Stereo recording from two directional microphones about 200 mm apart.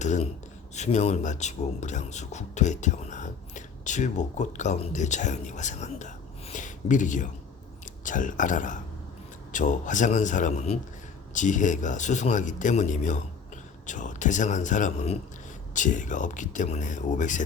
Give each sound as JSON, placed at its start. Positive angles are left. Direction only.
{"t": 0.0, "sound": "speech", "side_deg": 35}